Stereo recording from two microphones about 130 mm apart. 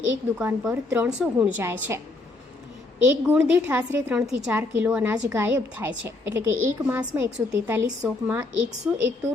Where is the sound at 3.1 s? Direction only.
15° right (ahead or behind).